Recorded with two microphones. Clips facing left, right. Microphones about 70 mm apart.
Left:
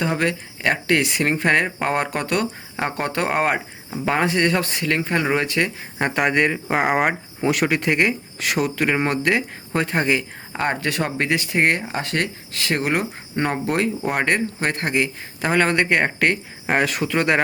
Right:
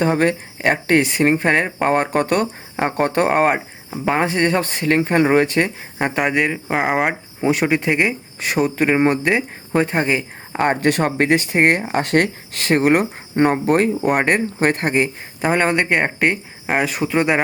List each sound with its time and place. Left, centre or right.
0.0 s speech: right
1.2 s speech: right
2.0 s speech: right
2.7 s speech: right
3.2 s speech: centre
4.2 s speech: right
6.0 s speech: centre
7.7 s speech: centre
8.6 s speech: right
8.9 s speech: centre
10.8 s speech: right
14.0 s speech: centre
16.9 s speech: centre